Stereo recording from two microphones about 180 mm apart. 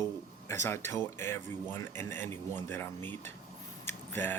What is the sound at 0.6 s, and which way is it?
Speech, 15° left (ahead or behind).